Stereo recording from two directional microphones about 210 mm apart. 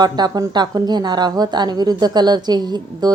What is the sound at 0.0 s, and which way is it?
A woman's voice, 20° right (ahead or behind).